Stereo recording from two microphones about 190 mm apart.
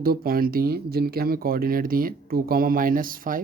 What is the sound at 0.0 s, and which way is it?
Speech, 50° right (ahead or behind).